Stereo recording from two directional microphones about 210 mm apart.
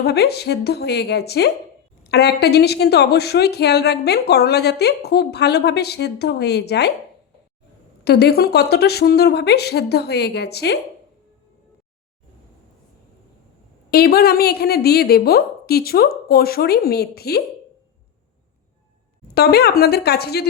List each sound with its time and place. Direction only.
0.0 s speech: 50° left (ahead or behind)
8.0 s speech: 50° left (ahead or behind)
13.9 s speech: 45° left (ahead or behind)
19.3 s speech: 50° left (ahead or behind)